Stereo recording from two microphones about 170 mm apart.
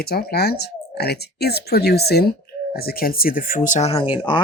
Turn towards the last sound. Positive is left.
turn(degrees=30)  # may be behind; listen again after turning